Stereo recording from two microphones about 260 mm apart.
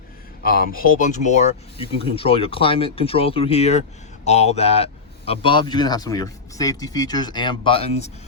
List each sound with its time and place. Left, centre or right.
0.4 s speech: left